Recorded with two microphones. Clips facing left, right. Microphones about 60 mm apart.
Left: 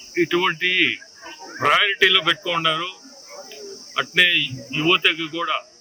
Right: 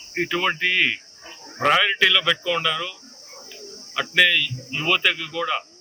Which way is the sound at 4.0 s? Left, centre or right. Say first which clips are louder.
Even; centre.